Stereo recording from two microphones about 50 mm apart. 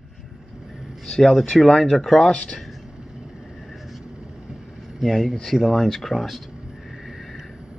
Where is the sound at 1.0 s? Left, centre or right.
Centre.